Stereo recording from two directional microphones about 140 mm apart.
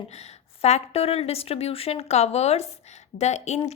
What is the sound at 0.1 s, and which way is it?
A woman's voice, 50° left (ahead or behind).